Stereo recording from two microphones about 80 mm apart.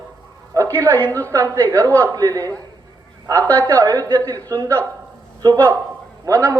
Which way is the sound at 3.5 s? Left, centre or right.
Right.